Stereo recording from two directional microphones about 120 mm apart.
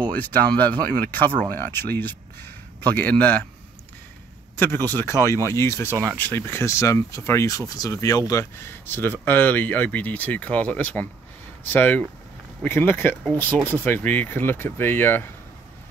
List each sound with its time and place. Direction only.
0.2 s speech: 15° left (ahead or behind)
4.8 s speech: 20° left (ahead or behind)